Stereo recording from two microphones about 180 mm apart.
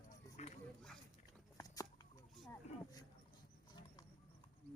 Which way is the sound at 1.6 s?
20° left (ahead or behind).